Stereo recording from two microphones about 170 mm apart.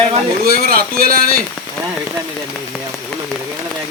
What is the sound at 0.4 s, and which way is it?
Speech, 60° right (ahead or behind).